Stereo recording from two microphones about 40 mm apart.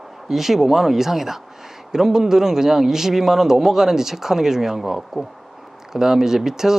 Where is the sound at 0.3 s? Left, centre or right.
Centre.